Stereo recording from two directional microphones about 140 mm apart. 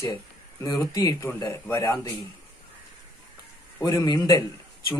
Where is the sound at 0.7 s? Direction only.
25° left (ahead or behind).